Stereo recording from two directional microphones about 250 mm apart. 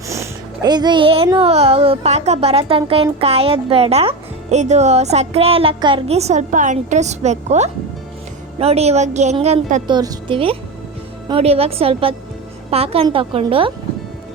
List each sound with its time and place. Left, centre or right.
0.1 s speech: centre
9.8 s speech: centre